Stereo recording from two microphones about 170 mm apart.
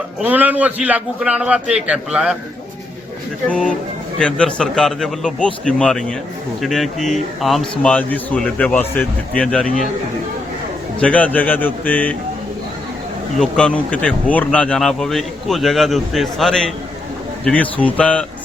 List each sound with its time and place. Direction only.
0.2 s a man's voice: 10° right (ahead or behind)
3.5 s speech: 5° left (ahead or behind)
11.0 s a man's voice: 10° left (ahead or behind)
13.4 s a man's voice: 5° left (ahead or behind)